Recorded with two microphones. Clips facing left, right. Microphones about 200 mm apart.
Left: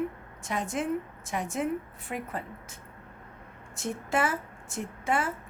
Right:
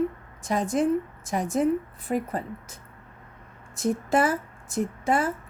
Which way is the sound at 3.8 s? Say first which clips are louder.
Right 6 dB; 35° right (ahead or behind).